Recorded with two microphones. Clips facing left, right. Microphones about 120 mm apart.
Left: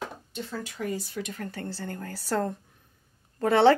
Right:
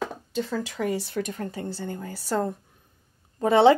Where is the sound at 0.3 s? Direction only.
90° right.